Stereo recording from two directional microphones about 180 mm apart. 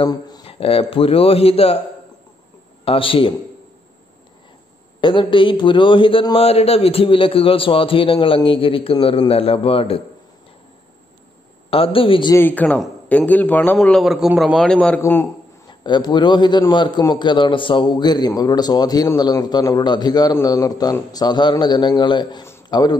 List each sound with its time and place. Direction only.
0.0 s a man's voice: 25° left (ahead or behind)
5.0 s a man's voice: 25° left (ahead or behind)
11.7 s a man's voice: 30° left (ahead or behind)
12.4 s a man's voice: 10° left (ahead or behind)
15.8 s a man's voice: 25° left (ahead or behind)